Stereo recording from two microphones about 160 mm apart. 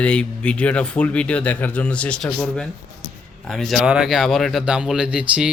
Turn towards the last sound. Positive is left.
turn(degrees=-5)  # may be behind; listen again after turning